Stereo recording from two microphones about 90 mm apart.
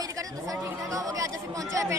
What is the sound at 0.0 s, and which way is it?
Chatter, 40° right (ahead or behind).